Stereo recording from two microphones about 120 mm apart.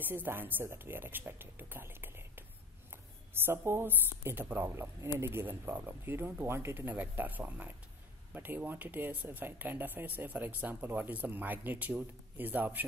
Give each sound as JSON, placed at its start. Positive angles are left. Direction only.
{"t": 0.0, "sound": "speech", "side_deg": -15}
{"t": 3.4, "sound": "a woman's voice", "side_deg": -20}